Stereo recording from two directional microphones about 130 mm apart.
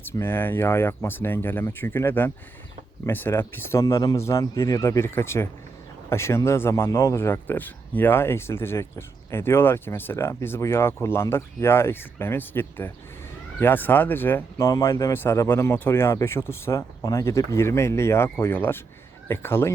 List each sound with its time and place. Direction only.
0.0 s speech: 20° left (ahead or behind)